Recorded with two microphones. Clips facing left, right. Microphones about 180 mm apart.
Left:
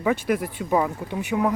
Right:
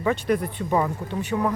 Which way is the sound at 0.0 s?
5° left (ahead or behind).